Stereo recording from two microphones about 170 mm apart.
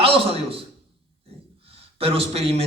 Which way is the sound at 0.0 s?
35° right (ahead or behind).